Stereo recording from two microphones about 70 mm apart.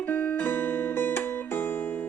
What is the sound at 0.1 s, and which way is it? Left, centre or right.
Music, left.